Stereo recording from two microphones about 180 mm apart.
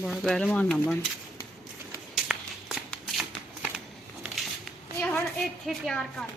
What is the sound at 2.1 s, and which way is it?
Shuffling cards, centre (ahead or behind).